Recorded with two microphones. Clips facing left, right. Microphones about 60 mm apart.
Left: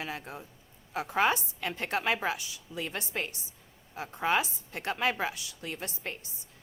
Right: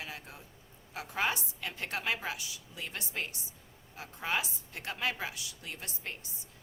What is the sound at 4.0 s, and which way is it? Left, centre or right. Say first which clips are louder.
A woman's voice: left 6 dB; left.